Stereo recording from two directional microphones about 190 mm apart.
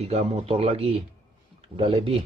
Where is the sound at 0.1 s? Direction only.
30° right (ahead or behind).